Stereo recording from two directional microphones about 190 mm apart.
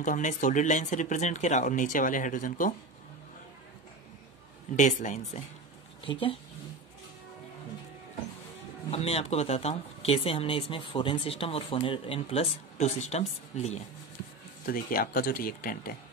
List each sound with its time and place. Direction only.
0.0 s speech: 40° left (ahead or behind)
4.7 s speech: 40° left (ahead or behind)
6.0 s speech: 30° left (ahead or behind)
8.9 s speech: 30° left (ahead or behind)
14.7 s speech: 50° left (ahead or behind)